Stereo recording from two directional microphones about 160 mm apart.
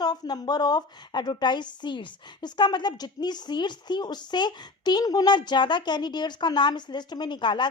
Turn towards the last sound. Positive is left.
turn(degrees=30)  # may be behind; listen again after turning